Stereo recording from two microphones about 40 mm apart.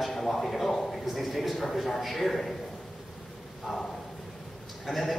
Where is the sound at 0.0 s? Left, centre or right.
Centre.